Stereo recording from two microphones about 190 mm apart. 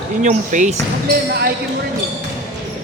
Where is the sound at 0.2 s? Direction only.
40° right (ahead or behind).